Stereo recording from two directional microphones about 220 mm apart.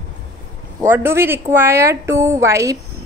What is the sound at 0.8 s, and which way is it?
Speech, 10° right (ahead or behind).